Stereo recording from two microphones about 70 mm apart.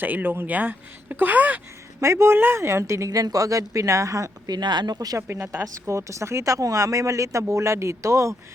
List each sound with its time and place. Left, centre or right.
0.0 s speech: right
2.0 s speech: right
4.4 s speech: right
5.3 s a woman's voice: right